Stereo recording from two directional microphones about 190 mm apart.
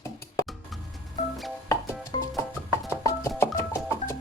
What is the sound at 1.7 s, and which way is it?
Music, 20° left (ahead or behind).